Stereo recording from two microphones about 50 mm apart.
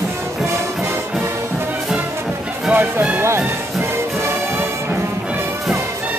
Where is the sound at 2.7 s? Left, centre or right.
Right.